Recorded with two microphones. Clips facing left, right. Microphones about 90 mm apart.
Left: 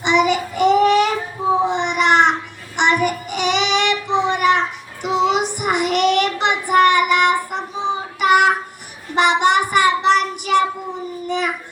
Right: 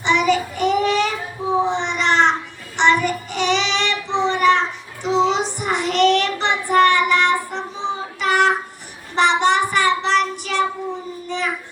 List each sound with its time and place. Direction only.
0.0 s child singing: 15° left (ahead or behind)
1.7 s a sound: 15° left (ahead or behind)
2.7 s child singing: 15° left (ahead or behind)